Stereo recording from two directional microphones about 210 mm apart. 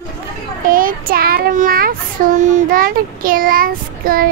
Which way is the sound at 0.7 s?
40° right (ahead or behind).